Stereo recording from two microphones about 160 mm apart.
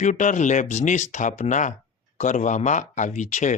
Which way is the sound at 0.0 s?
50° left (ahead or behind).